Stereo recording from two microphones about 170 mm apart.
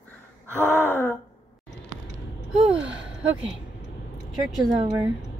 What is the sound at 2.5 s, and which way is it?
Speech, 5° right (ahead or behind).